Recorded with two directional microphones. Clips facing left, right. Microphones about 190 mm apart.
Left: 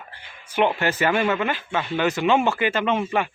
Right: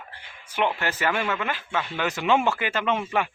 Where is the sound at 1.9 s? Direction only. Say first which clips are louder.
Left 4 dB; 20° left (ahead or behind).